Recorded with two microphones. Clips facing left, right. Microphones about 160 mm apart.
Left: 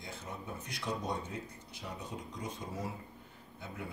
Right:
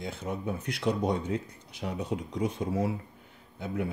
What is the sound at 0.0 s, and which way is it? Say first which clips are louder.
Speech: right 10 dB; 75° right (ahead or behind).